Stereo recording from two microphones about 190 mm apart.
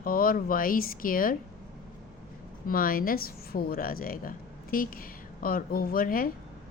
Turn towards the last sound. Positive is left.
turn(degrees=50)  # may be behind; listen again after turning